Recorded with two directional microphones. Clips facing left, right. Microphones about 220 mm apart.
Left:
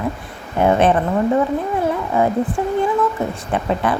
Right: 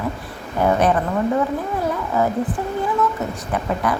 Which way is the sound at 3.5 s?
25° left (ahead or behind).